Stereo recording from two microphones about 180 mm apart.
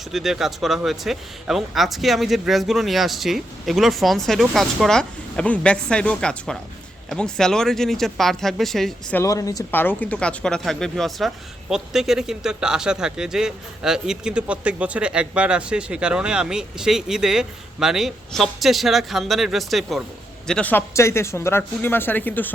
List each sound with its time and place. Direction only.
0.1 s a man's voice: centre (ahead or behind)
9.2 s a man's voice: 20° left (ahead or behind)